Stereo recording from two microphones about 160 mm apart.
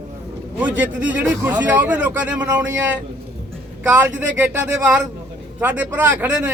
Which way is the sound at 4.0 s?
10° right (ahead or behind).